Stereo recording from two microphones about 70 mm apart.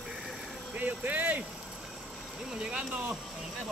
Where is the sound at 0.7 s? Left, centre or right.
Right.